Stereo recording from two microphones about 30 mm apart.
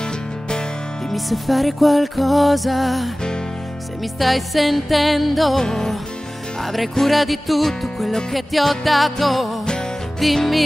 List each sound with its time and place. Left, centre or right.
1.1 s music: centre
4.2 s music: centre
5.6 s music: centre
6.6 s music: centre